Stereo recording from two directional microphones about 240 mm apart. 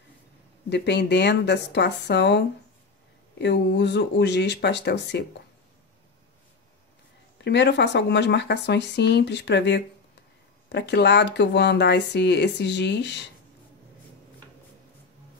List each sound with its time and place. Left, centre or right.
0.7 s speech: left
7.4 s speech: left